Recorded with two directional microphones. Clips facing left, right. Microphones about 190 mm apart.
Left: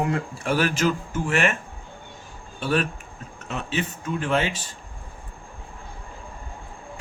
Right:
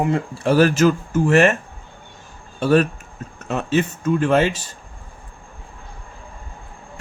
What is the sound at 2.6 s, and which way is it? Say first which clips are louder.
Speech: right 8 dB; 45° right (ahead or behind).